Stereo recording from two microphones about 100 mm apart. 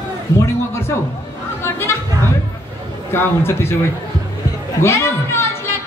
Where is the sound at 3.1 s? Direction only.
25° left (ahead or behind).